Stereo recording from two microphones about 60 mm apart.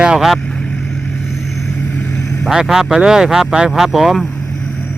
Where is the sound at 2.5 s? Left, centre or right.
Centre.